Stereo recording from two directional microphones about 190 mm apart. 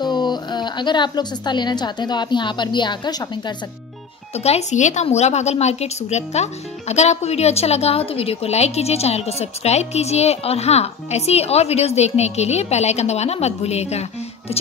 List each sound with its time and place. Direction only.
0.0 s speech: 20° left (ahead or behind)
4.4 s a woman's voice: 35° left (ahead or behind)